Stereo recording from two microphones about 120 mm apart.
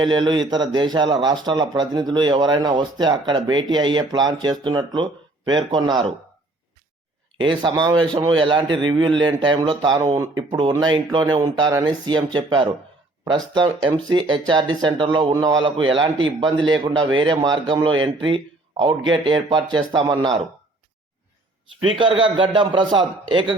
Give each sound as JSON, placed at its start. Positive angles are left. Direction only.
{"t": 0.0, "sound": "speech", "side_deg": -40}
{"t": 7.3, "sound": "speech", "side_deg": -40}
{"t": 21.8, "sound": "a man's voice", "side_deg": -45}